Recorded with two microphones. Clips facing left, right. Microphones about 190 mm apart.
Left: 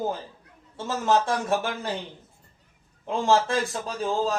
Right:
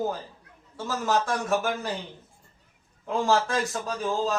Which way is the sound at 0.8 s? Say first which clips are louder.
Left 3 dB; 25° left (ahead or behind).